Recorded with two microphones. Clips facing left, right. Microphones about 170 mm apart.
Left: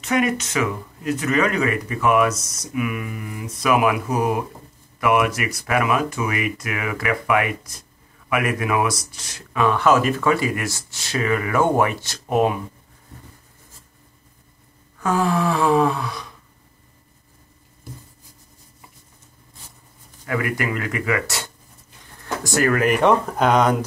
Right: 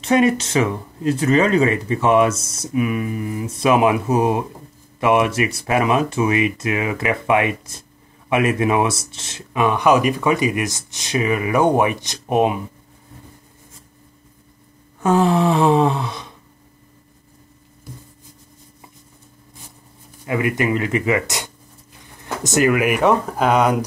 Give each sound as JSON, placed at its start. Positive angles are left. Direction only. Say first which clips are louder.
{"t": 0.0, "sound": "speech", "louder": "right 5 dB", "side_deg": -30}
{"t": 15.0, "sound": "speech", "louder": "right 4 dB", "side_deg": -25}
{"t": 20.2, "sound": "speech", "louder": "right 4 dB", "side_deg": -20}